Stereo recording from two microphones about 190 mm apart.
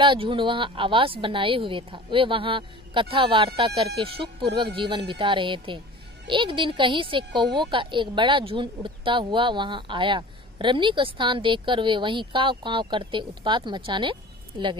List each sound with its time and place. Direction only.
0.0 s a woman's voice: 25° right (ahead or behind)